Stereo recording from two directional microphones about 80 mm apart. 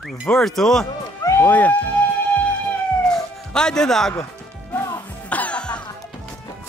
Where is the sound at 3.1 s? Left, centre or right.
Centre.